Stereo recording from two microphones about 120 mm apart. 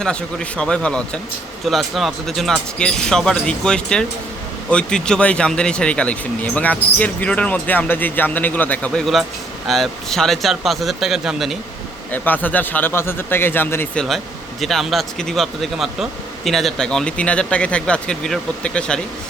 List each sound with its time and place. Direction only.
0.0 s speech: 10° left (ahead or behind)
12.1 s speech: 15° left (ahead or behind)
13.9 s speech: 5° left (ahead or behind)